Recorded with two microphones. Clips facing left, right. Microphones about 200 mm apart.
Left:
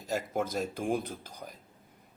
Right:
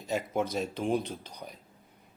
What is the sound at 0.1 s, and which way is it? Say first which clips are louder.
Speech: right 1 dB; centre (ahead or behind).